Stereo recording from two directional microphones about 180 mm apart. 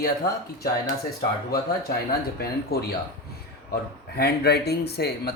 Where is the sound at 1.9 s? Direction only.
60° left (ahead or behind).